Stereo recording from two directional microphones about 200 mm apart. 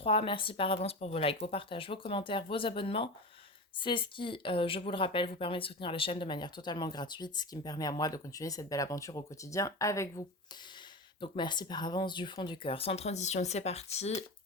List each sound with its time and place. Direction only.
0.0 s speech: 25° left (ahead or behind)